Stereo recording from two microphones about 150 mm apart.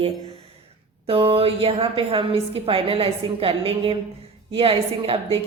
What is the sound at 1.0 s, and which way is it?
Speech, 40° right (ahead or behind).